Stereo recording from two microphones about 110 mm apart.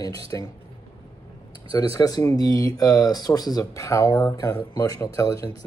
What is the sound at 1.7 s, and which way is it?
Speech, 35° left (ahead or behind).